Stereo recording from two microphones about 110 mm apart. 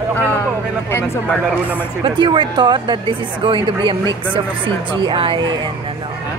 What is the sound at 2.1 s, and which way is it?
Speech, 45° right (ahead or behind).